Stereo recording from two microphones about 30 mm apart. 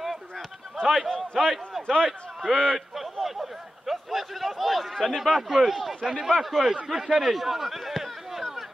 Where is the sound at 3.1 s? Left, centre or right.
Centre.